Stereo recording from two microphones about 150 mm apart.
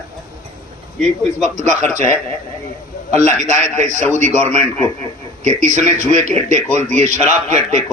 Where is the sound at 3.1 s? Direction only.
50° right (ahead or behind).